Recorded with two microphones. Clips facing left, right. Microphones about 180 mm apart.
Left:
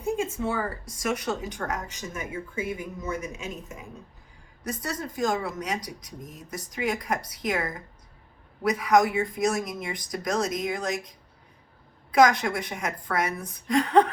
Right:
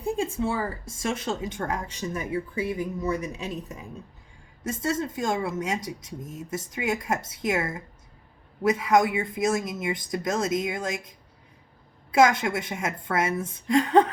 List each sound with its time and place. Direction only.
0.0 s a woman's voice: 30° right (ahead or behind)
12.1 s speech: 25° right (ahead or behind)